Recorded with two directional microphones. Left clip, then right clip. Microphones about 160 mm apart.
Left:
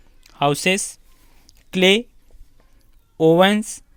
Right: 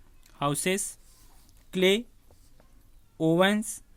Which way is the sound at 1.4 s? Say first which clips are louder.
Left 8 dB; 30° left (ahead or behind).